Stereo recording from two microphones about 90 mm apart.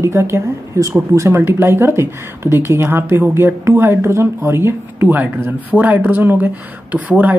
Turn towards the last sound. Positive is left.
turn(degrees=-20)  # may be behind; listen again after turning